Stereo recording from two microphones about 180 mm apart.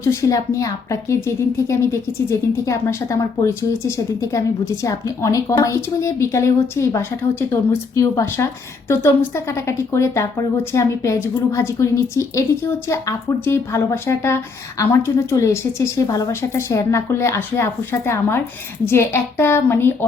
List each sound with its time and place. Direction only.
0.0 s speech: 15° left (ahead or behind)